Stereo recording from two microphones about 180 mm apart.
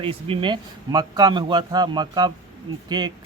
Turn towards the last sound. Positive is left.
turn(degrees=-25)  # may be behind; listen again after turning